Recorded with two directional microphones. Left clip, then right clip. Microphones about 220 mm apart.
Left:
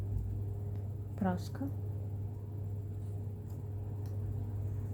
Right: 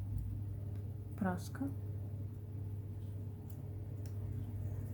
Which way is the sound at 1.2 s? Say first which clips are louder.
Left 3 dB; 5° left (ahead or behind).